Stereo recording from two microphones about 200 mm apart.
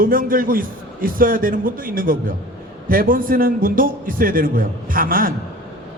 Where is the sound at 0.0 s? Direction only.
45° right (ahead or behind).